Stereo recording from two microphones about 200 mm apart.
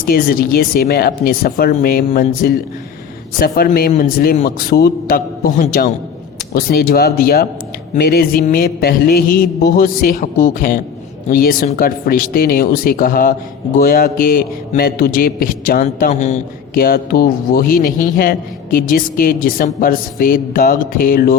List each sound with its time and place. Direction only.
0.0 s a man's voice: 50° left (ahead or behind)